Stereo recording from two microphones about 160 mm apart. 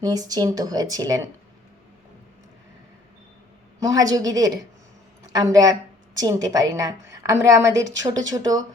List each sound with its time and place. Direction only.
0.0 s a woman's voice: 20° right (ahead or behind)
3.8 s a woman's voice: 20° right (ahead or behind)